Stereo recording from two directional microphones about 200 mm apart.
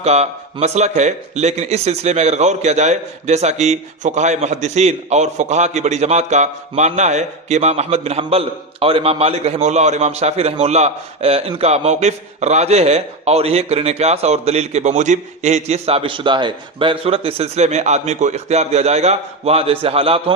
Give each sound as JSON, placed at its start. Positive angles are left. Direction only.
{"t": 0.0, "sound": "a man's voice", "side_deg": -35}